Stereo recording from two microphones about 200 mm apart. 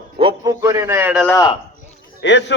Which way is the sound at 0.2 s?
25° right (ahead or behind).